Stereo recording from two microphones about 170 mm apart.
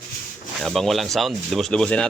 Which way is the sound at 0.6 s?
Centre (ahead or behind).